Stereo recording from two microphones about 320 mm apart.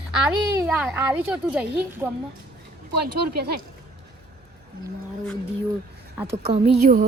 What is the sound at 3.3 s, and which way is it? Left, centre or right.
Speech, right.